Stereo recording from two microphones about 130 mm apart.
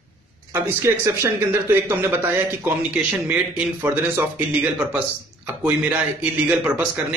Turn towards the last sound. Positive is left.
turn(degrees=-10)  # may be behind; listen again after turning